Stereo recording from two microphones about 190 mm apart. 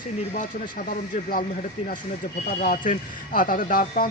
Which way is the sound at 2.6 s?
45° left (ahead or behind).